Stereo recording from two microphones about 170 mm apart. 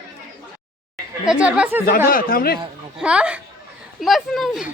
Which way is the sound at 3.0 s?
5° right (ahead or behind).